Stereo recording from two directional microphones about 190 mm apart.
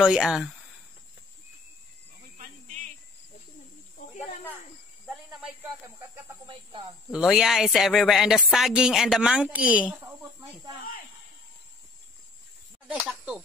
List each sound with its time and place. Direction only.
0.0 s a woman's voice: 5° right (ahead or behind)
2.3 s cricket: 40° right (ahead or behind)
5.0 s cricket: centre (ahead or behind)
5.9 s speech: 20° right (ahead or behind)
7.1 s a woman's voice: 5° right (ahead or behind)
12.8 s speech: 5° right (ahead or behind)